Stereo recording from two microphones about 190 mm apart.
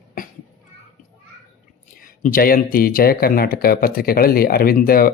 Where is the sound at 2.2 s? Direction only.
50° left (ahead or behind).